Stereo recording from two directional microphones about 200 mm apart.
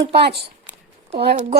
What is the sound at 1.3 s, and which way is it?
Speech, 35° right (ahead or behind).